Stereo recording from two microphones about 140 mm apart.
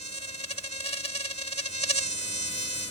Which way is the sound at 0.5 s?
50° left (ahead or behind).